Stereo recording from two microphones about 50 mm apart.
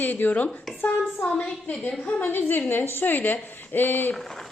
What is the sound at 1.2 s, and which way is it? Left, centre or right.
Speech, left.